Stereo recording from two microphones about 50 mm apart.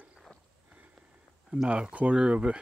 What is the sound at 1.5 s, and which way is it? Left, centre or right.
Speech, right.